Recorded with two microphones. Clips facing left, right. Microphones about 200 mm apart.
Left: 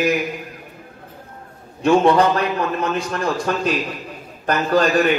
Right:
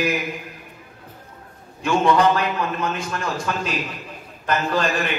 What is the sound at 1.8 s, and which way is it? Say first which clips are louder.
A man's voice: left 3 dB; 35° left (ahead or behind).